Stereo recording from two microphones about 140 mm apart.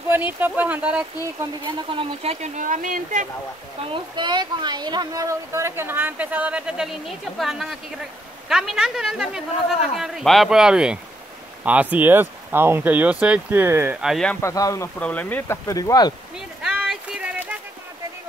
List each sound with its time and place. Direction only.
0.1 s speech: 15° right (ahead or behind)
1.6 s speech: 35° right (ahead or behind)
2.4 s speech: 60° right (ahead or behind)
3.9 s speech: 35° right (ahead or behind); by 13.9 s 15° right (ahead or behind)
14.0 s speech: centre (ahead or behind)
14.3 s speech: 20° left (ahead or behind)
15.0 s speech: 10° left (ahead or behind); by 16.1 s 25° left (ahead or behind)
16.3 s a sound: 5° right (ahead or behind)